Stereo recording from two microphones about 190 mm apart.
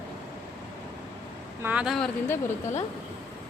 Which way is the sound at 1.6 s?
5° right (ahead or behind).